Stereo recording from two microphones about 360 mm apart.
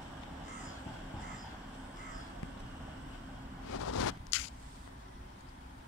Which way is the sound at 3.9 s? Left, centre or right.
Left.